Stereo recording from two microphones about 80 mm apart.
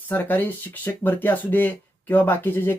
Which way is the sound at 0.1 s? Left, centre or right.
Left.